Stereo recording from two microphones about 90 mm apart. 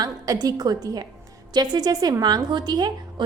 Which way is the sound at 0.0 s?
45° right (ahead or behind).